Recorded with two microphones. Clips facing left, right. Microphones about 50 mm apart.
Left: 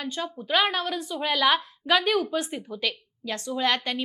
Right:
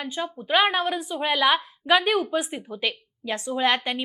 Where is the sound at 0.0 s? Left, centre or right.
Centre.